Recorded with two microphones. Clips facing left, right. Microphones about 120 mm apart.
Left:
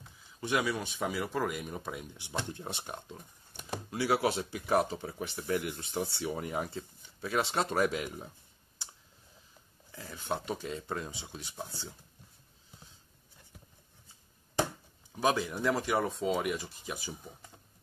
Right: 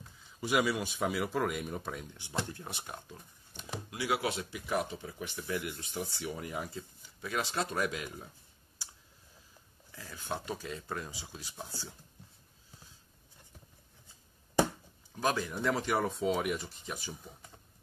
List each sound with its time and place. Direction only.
0.4 s speech: 5° right (ahead or behind)
2.0 s speech: 15° left (ahead or behind)
2.6 s speech: 25° left (ahead or behind)
9.9 s speech: 30° left (ahead or behind)
15.1 s speech: 15° left (ahead or behind)